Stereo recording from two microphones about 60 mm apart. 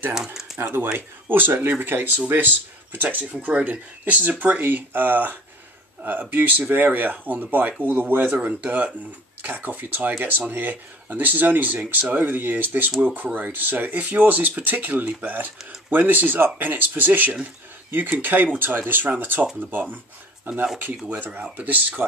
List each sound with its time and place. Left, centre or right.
0.1 s speech: centre
0.6 s speech: right
21.0 s speech: right